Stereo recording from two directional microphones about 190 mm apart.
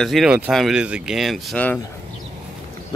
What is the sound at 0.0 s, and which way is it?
Speech, centre (ahead or behind).